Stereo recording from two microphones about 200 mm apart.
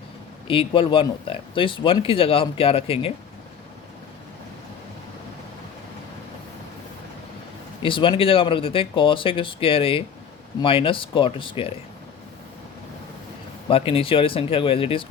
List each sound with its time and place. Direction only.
0.4 s speech: 25° left (ahead or behind)
7.8 s speech: 25° left (ahead or behind)
13.7 s speech: 30° left (ahead or behind)